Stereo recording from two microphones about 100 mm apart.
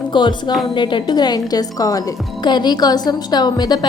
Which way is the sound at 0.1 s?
50° left (ahead or behind).